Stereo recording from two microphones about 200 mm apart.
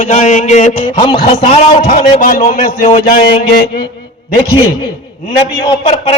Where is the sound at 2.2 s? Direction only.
45° left (ahead or behind).